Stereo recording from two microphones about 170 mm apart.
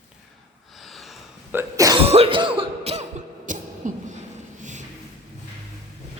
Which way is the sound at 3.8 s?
50° right (ahead or behind).